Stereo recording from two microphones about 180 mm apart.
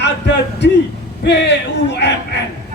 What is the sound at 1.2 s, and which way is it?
Speech, 70° left (ahead or behind).